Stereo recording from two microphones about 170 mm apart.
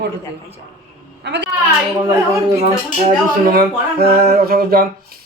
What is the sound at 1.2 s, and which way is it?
Speech, 80° right.